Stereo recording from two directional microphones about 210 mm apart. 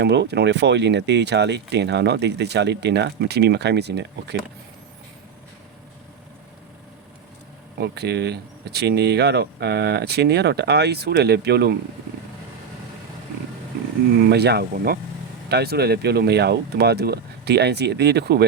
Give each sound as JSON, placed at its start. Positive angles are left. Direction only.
{"t": 0.0, "sound": "speech", "side_deg": -55}
{"t": 7.8, "sound": "speech", "side_deg": -50}
{"t": 14.2, "sound": "speech", "side_deg": -50}